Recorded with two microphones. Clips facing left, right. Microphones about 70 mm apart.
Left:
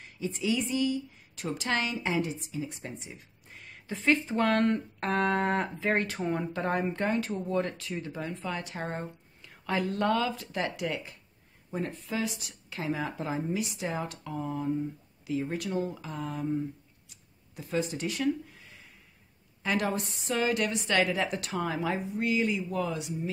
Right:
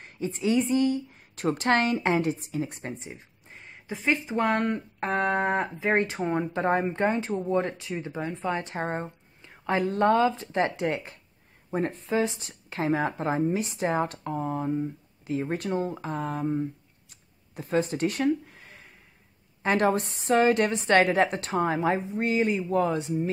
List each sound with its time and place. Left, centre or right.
0.0 s a woman's voice: right
17.1 s a sound: right
19.6 s a woman's voice: right